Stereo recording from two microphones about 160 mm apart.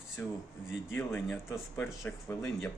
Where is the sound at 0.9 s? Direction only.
15° left (ahead or behind).